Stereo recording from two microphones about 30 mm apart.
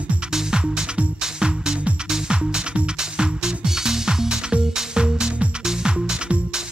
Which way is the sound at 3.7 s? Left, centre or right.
Centre.